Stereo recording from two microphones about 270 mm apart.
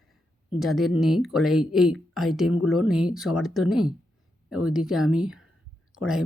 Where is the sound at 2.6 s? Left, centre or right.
Left.